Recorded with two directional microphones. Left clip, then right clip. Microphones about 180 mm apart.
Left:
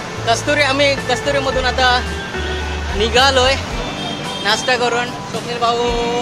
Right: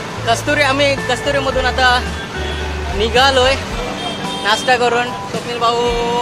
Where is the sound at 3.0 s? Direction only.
5° left (ahead or behind).